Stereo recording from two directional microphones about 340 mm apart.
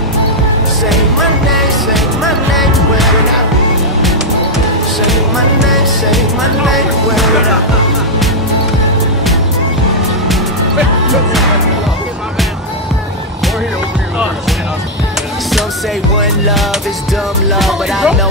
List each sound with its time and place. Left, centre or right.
1.5 s music: centre
5.0 s music: centre
17.6 s music: centre